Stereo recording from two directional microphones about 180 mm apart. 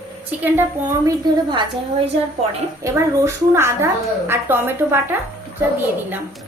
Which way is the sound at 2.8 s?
15° right (ahead or behind).